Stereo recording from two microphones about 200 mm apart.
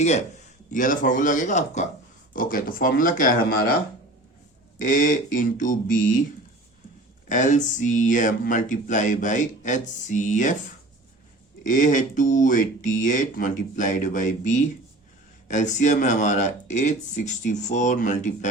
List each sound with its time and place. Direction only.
0.7 s speech: 40° left (ahead or behind)
4.8 s speech: 40° left (ahead or behind)
7.3 s speech: 40° left (ahead or behind)
11.6 s speech: 40° left (ahead or behind)